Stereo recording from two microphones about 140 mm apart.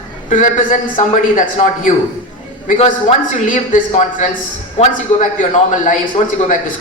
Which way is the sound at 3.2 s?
70° left (ahead or behind).